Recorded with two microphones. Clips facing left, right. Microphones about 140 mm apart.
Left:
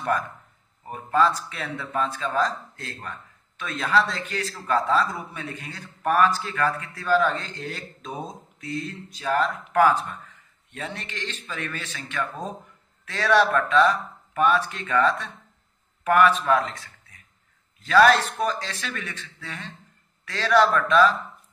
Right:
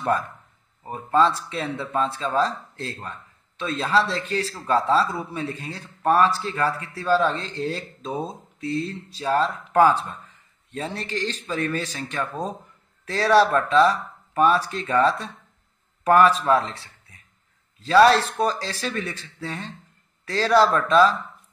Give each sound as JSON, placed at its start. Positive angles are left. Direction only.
{"t": 0.8, "sound": "a man's voice", "side_deg": -25}